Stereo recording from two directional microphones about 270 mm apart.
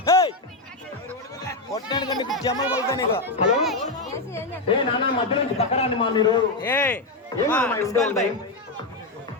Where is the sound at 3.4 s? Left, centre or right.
Centre.